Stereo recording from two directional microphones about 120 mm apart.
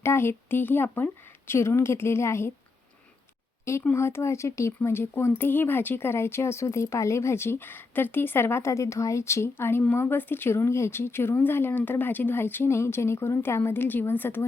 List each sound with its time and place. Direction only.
0.0 s speech: 20° left (ahead or behind)
3.7 s speech: 20° left (ahead or behind)